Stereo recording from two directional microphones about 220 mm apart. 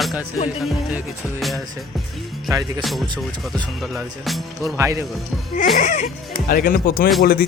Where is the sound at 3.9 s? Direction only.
Centre (ahead or behind).